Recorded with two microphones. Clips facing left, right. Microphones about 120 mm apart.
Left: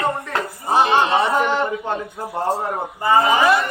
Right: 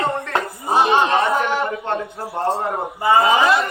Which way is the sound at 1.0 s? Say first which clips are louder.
Even; 10° left (ahead or behind).